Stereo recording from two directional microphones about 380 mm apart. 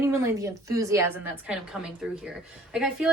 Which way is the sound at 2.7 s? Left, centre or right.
Centre.